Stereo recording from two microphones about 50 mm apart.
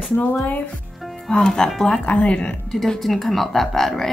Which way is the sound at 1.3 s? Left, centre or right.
Centre.